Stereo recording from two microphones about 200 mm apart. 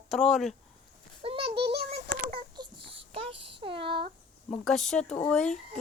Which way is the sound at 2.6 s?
25° right (ahead or behind).